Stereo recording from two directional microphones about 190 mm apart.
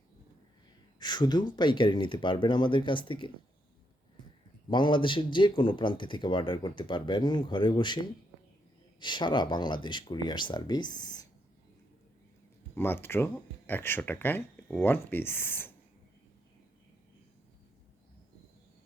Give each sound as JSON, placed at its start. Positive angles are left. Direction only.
{"t": 0.9, "sound": "speech", "side_deg": 20}
{"t": 4.7, "sound": "speech", "side_deg": 25}
{"t": 9.0, "sound": "speech", "side_deg": 25}
{"t": 12.7, "sound": "speech", "side_deg": 10}